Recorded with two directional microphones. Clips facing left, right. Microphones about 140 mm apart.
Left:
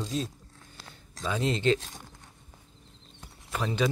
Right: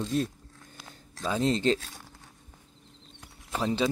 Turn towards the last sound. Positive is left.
turn(degrees=-30)  # may be behind; listen again after turning